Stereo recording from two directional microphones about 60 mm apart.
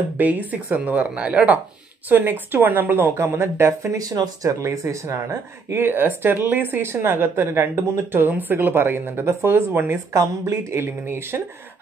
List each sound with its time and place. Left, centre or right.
0.2 s a woman's voice: right
2.0 s speech: right
4.0 s speech: right
4.5 s speech: right
5.7 s speech: right
10.1 s speech: right